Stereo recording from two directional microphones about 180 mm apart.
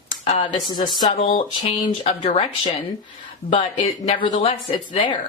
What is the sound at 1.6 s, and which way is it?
Speech, 35° left (ahead or behind).